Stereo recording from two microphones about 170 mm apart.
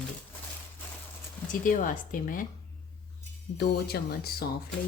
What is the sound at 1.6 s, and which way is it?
Speech, 50° left (ahead or behind).